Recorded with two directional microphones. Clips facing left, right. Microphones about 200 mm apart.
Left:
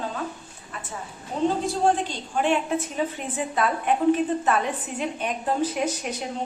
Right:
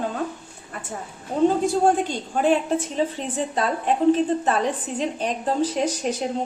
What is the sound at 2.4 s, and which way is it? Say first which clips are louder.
A woman's voice: right 4 dB; 35° right (ahead or behind).